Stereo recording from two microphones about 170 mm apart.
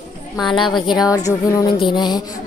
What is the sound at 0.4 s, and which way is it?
Speech, centre (ahead or behind).